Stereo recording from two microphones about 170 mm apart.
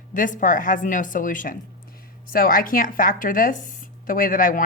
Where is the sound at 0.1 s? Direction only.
50° left (ahead or behind).